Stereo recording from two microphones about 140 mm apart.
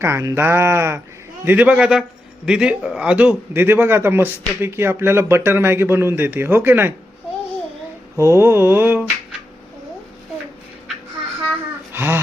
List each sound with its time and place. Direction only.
0.0 s a man's voice: 20° right (ahead or behind)
8.1 s a man's voice: 20° right (ahead or behind)
11.9 s a sound: 15° right (ahead or behind)